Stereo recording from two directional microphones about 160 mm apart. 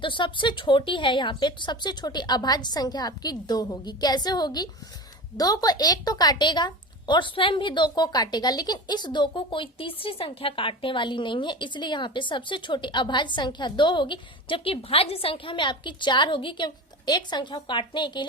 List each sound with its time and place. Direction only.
0.0 s a woman's voice: 30° left (ahead or behind)